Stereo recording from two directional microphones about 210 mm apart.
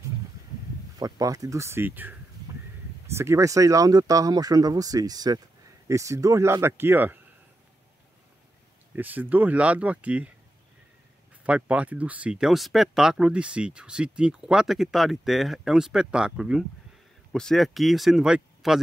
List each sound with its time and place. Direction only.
0.9 s speech: 15° right (ahead or behind)
8.9 s speech: 10° right (ahead or behind)
11.4 s speech: 5° right (ahead or behind)